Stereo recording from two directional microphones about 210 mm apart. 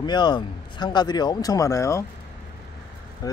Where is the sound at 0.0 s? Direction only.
20° left (ahead or behind).